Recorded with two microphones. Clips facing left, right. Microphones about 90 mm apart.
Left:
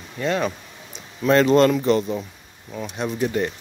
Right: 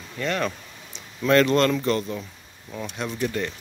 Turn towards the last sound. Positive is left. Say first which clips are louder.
# left 4 dB
turn(degrees=20)  # may be behind; listen again after turning